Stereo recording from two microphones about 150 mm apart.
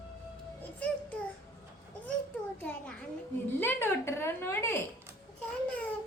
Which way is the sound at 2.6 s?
10° left (ahead or behind).